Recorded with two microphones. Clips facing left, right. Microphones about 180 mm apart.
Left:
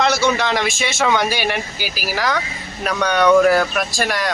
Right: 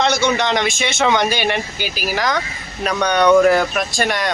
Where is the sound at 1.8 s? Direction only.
10° left (ahead or behind).